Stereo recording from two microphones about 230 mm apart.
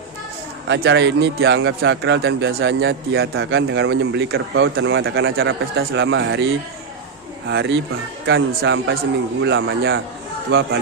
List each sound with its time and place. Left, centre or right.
0.7 s a man's voice: right
7.4 s a man's voice: right